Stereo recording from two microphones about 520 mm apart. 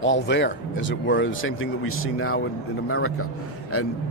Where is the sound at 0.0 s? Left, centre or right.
Left.